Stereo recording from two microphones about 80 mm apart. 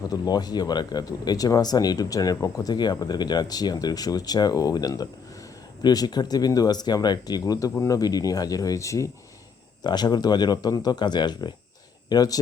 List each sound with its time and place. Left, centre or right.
0.1 s speech: left
9.8 s speech: left
12.0 s speech: left